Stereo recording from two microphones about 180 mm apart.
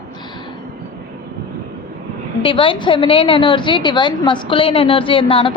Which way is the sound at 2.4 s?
30° left (ahead or behind).